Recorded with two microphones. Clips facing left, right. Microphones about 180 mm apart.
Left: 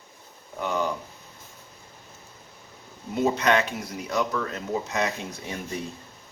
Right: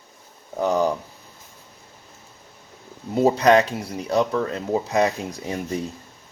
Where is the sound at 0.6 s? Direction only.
40° right (ahead or behind).